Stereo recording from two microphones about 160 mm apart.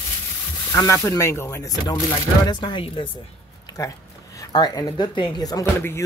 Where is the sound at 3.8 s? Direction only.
20° left (ahead or behind).